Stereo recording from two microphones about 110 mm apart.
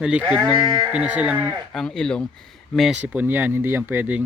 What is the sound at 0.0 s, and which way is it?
Speech, 10° right (ahead or behind).